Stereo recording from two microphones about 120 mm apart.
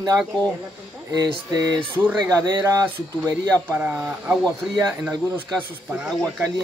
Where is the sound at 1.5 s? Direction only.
35° right (ahead or behind).